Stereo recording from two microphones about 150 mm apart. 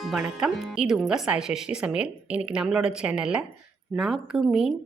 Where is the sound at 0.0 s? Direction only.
5° right (ahead or behind).